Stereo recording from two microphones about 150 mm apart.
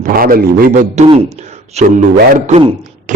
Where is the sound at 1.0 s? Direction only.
50° right (ahead or behind).